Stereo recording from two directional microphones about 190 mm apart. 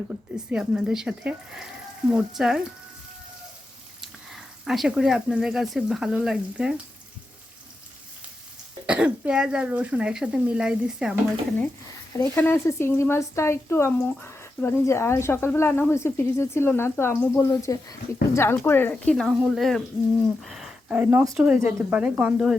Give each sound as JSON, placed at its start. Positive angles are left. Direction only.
{"t": 0.1, "sound": "speech", "side_deg": -5}
{"t": 4.0, "sound": "speech", "side_deg": 0}
{"t": 8.9, "sound": "speech", "side_deg": -5}
{"t": 12.1, "sound": "speech", "side_deg": 10}